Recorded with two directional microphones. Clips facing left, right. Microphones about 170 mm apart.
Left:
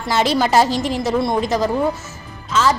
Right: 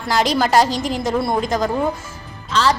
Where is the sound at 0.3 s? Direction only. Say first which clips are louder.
Left 1 dB; 5° left (ahead or behind).